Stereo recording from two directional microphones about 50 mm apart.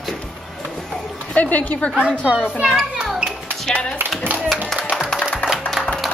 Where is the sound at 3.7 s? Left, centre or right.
Left.